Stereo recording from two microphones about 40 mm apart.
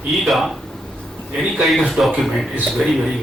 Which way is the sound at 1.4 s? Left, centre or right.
Centre.